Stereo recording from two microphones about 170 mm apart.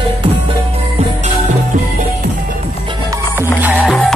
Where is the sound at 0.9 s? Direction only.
45° right (ahead or behind).